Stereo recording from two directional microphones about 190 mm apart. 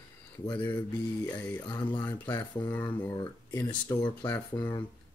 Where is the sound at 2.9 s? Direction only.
20° left (ahead or behind).